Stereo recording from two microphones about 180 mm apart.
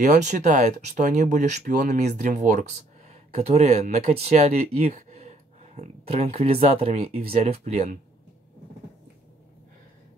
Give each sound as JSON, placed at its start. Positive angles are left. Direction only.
{"t": 0.0, "sound": "speech", "side_deg": -45}